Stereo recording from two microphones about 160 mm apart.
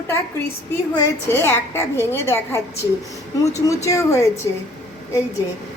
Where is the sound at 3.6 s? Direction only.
20° left (ahead or behind).